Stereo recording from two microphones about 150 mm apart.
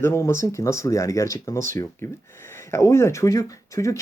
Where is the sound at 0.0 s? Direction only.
15° left (ahead or behind).